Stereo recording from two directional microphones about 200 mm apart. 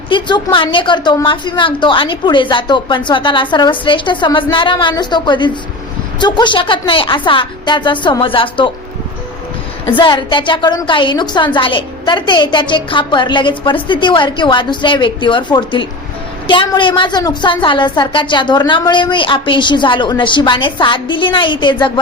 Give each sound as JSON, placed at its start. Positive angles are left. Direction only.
{"t": 0.1, "sound": "a woman's voice", "side_deg": 20}
{"t": 9.9, "sound": "a woman's voice", "side_deg": 25}